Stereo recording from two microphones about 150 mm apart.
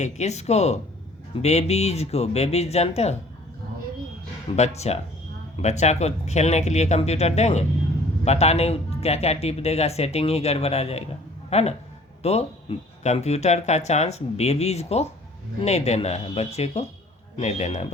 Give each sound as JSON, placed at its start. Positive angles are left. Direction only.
{"t": 0.0, "sound": "speech", "side_deg": 50}
{"t": 4.5, "sound": "speech", "side_deg": 45}